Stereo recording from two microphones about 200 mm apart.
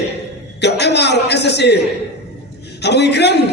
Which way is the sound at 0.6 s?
60° left (ahead or behind).